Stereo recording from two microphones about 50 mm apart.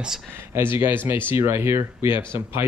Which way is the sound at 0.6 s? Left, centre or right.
Right.